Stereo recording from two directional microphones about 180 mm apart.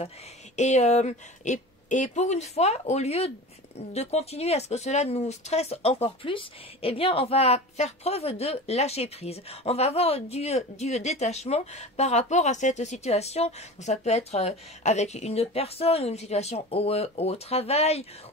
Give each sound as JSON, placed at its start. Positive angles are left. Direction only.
{"t": 0.6, "sound": "speech", "side_deg": 40}